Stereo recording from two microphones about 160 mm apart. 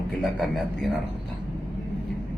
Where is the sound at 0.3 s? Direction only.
5° left (ahead or behind).